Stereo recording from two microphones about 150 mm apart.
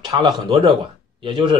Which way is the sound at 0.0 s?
30° right (ahead or behind).